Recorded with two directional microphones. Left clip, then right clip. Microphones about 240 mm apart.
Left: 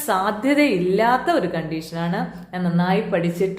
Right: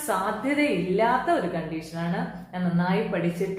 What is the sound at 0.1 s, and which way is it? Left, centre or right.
A woman's voice, left.